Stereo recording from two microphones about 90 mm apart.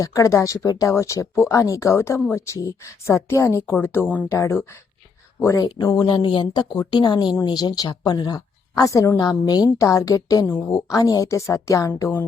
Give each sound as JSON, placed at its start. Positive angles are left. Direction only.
{"t": 0.0, "sound": "speech", "side_deg": 35}
{"t": 4.3, "sound": "speech", "side_deg": 30}
{"t": 5.6, "sound": "a woman's voice", "side_deg": 50}
{"t": 6.1, "sound": "a woman's voice", "side_deg": 65}
{"t": 10.4, "sound": "speech", "side_deg": 30}
{"t": 10.9, "sound": "speech", "side_deg": 40}